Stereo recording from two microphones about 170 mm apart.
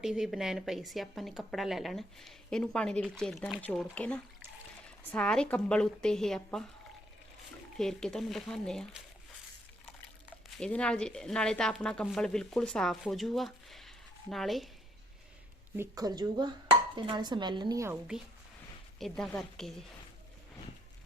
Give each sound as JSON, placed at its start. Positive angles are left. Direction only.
{"t": 0.0, "sound": "speech", "side_deg": 0}
{"t": 7.8, "sound": "speech", "side_deg": 5}
{"t": 10.6, "sound": "speech", "side_deg": 5}
{"t": 15.7, "sound": "speech", "side_deg": -20}
{"t": 18.9, "sound": "speech", "side_deg": 0}